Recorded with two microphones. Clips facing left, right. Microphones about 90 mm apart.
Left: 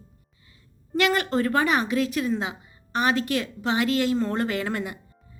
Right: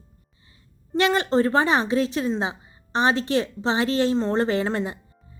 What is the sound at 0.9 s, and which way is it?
A woman's voice, 25° right (ahead or behind).